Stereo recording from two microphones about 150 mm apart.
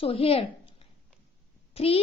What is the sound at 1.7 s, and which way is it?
Speech, 40° left (ahead or behind).